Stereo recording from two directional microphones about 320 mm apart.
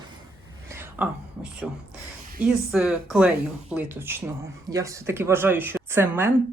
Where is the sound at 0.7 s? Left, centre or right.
Centre.